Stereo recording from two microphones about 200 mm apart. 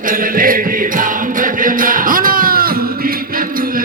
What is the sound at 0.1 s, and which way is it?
Music, 45° right (ahead or behind).